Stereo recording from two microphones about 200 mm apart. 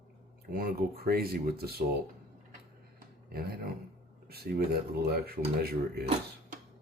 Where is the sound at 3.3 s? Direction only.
50° right (ahead or behind).